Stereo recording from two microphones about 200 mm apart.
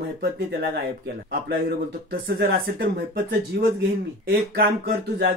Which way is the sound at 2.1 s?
50° right (ahead or behind).